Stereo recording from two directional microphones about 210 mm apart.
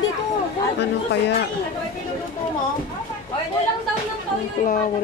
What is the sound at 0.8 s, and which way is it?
Speech, 55° left (ahead or behind).